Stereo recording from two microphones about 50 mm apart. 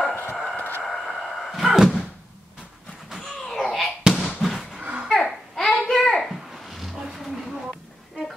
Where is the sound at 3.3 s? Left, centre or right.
Centre.